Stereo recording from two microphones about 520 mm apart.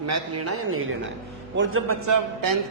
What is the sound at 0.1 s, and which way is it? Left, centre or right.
A man's voice, right.